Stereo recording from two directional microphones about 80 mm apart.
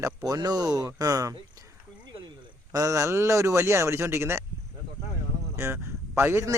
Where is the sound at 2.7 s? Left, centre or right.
Right.